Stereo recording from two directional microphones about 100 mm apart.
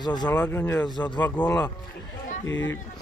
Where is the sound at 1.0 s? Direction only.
50° left (ahead or behind).